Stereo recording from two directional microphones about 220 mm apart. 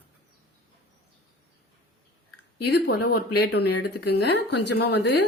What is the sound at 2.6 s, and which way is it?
A woman's voice, 45° left (ahead or behind).